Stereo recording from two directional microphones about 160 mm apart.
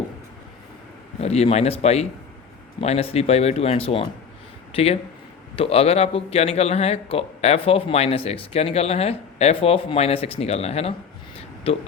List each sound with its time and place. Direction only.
1.2 s a man's voice: 40° left (ahead or behind)